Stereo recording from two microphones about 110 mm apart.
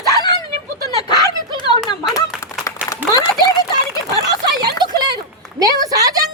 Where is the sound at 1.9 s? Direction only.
35° left (ahead or behind).